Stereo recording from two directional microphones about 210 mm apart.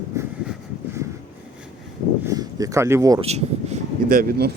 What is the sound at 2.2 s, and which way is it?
Speech, 15° right (ahead or behind).